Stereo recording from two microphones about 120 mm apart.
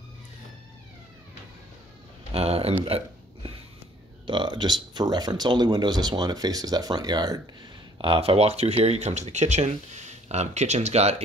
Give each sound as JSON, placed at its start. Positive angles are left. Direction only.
{"t": 2.3, "sound": "a sound", "side_deg": -55}
{"t": 2.9, "sound": "speech", "side_deg": -55}
{"t": 4.3, "sound": "speech", "side_deg": -40}
{"t": 8.0, "sound": "speech", "side_deg": -50}